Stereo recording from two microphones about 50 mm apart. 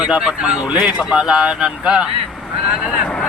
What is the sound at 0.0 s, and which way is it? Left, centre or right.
Speech, right.